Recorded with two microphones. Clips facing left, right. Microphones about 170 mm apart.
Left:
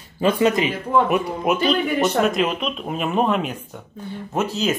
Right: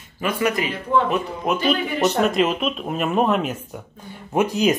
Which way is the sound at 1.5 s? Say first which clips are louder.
Left 2 dB; centre (ahead or behind).